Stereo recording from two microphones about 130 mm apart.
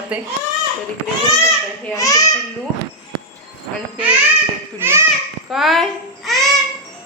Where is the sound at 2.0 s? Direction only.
25° left (ahead or behind).